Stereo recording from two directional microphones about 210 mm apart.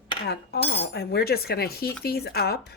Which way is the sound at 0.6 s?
50° left (ahead or behind).